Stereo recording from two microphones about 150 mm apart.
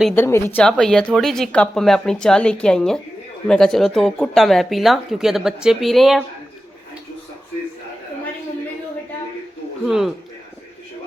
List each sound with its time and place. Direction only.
0.1 s a woman's voice: 15° left (ahead or behind)
0.6 s speech: 5° left (ahead or behind)
9.8 s speech: 5° right (ahead or behind)